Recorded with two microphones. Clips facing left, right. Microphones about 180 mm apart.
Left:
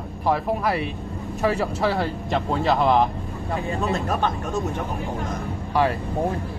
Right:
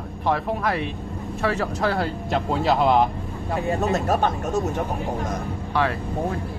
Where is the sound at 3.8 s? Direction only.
40° right (ahead or behind).